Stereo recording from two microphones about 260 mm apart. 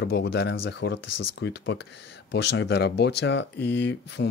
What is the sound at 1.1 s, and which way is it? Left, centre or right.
Speech, left.